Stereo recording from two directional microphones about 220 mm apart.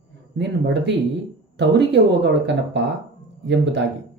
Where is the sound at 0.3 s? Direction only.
50° right (ahead or behind).